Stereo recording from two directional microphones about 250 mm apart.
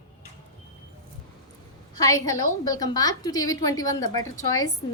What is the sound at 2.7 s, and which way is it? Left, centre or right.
A woman's voice, centre.